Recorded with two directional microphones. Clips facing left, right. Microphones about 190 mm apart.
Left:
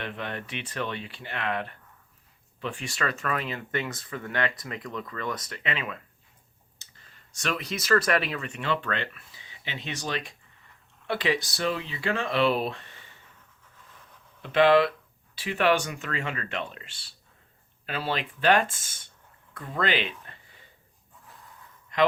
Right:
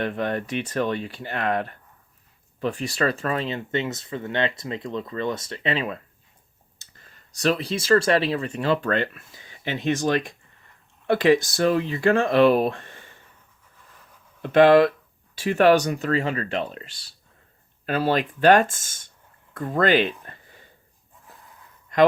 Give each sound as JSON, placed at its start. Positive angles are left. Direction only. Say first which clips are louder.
{"t": 0.0, "sound": "speech", "louder": "right 9 dB", "side_deg": -45}
{"t": 14.4, "sound": "speech", "louder": "right 5 dB", "side_deg": -45}